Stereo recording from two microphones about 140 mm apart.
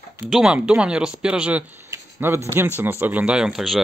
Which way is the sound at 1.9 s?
15° right (ahead or behind).